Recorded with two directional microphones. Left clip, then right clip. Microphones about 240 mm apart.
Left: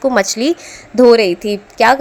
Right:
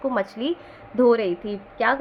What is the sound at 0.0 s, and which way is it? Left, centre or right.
A woman's voice, left.